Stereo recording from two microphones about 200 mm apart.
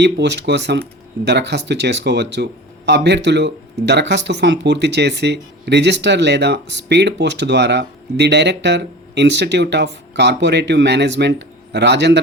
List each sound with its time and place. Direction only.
0.0 s speech: 60° right (ahead or behind)